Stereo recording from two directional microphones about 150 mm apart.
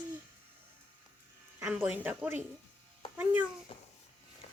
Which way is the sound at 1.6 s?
15° right (ahead or behind).